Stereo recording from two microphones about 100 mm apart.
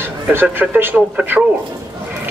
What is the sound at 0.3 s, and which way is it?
Speech, 20° right (ahead or behind).